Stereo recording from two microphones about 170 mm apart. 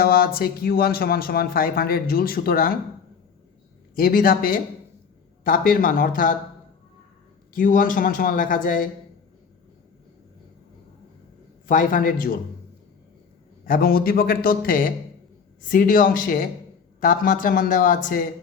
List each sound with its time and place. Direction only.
0.0 s speech: 60° left (ahead or behind)
3.9 s speech: 55° left (ahead or behind)
7.5 s speech: 50° left (ahead or behind)
11.7 s speech: 50° left (ahead or behind)
13.7 s speech: 60° left (ahead or behind)